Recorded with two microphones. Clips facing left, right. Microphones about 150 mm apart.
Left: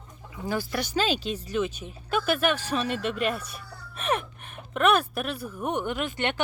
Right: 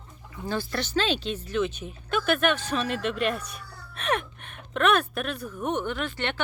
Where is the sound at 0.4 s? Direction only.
10° left (ahead or behind).